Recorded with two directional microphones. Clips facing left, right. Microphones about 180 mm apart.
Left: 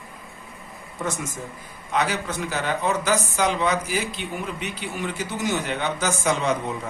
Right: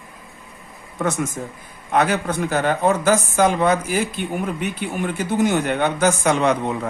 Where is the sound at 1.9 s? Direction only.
55° right (ahead or behind).